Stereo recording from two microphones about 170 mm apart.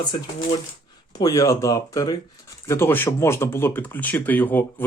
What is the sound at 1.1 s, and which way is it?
Speech, 20° left (ahead or behind).